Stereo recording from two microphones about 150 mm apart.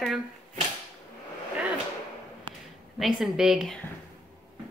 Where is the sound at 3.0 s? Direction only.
Centre (ahead or behind).